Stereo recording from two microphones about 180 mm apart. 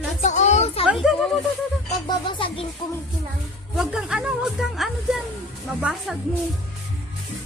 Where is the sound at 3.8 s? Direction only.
5° right (ahead or behind).